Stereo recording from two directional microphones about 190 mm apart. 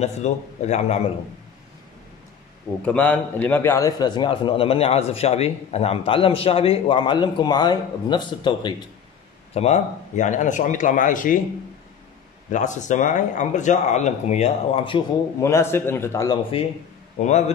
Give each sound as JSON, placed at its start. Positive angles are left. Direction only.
{"t": 0.0, "sound": "speech", "side_deg": 35}
{"t": 2.8, "sound": "a man's voice", "side_deg": 5}
{"t": 9.5, "sound": "speech", "side_deg": 35}
{"t": 12.4, "sound": "speech", "side_deg": 40}
{"t": 15.4, "sound": "a man's voice", "side_deg": 15}
{"t": 17.2, "sound": "speech", "side_deg": 35}